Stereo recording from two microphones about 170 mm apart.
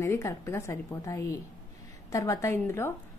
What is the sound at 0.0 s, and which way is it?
A woman's voice, 15° left (ahead or behind).